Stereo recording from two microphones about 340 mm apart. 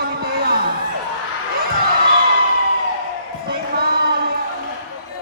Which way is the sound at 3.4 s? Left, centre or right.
Right.